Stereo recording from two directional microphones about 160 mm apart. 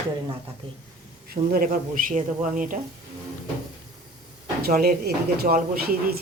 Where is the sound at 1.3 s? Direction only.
65° right (ahead or behind).